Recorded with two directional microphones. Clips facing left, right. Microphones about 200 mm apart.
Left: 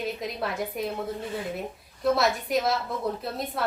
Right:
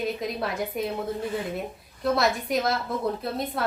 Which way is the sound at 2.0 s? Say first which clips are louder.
Even; centre (ahead or behind).